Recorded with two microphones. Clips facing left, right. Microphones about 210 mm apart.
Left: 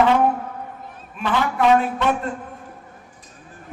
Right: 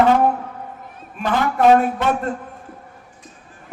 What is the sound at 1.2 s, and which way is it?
Speech, 45° right (ahead or behind).